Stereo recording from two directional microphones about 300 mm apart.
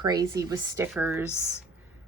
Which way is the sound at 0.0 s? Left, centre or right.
Centre.